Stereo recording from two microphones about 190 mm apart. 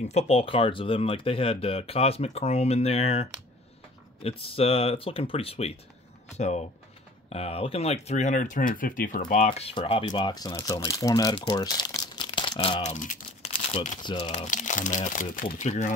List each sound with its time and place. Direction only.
0.1 s speech: 30° left (ahead or behind); by 9.2 s 45° left (ahead or behind)
9.3 s speech: 35° left (ahead or behind)
12.9 s crumpling: 40° left (ahead or behind)
13.5 s speech: 30° left (ahead or behind)
14.3 s speech: 40° left (ahead or behind)